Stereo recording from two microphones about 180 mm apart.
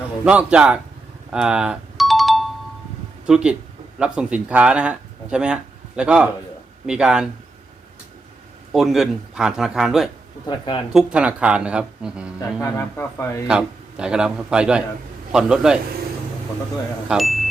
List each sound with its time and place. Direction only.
0.3 s speech: 5° right (ahead or behind)
1.3 s ringtone: 5° right (ahead or behind)
3.2 s speech: 5° right (ahead or behind)
8.7 s speech: centre (ahead or behind)
12.4 s a man's voice: 15° left (ahead or behind)
13.5 s speech: 5° right (ahead or behind)
17.1 s speech: centre (ahead or behind)